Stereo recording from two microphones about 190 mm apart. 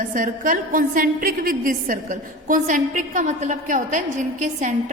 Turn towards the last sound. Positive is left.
turn(degrees=-40)  # may be behind; listen again after turning